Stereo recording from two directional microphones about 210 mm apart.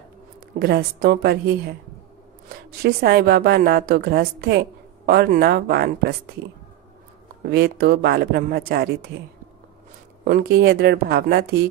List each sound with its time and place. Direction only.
0.6 s a woman's voice: 45° right (ahead or behind)
7.4 s a woman's voice: 50° right (ahead or behind)
10.2 s a woman's voice: 45° right (ahead or behind)